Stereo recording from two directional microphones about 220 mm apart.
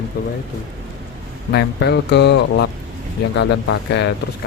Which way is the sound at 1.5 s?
50° left (ahead or behind).